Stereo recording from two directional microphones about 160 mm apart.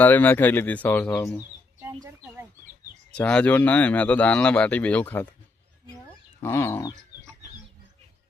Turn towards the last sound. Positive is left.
turn(degrees=20)  # may be behind; listen again after turning